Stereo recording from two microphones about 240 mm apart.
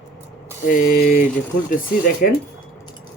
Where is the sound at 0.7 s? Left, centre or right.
Left.